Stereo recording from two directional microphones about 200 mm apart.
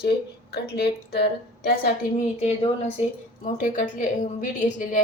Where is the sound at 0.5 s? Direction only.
55° left (ahead or behind).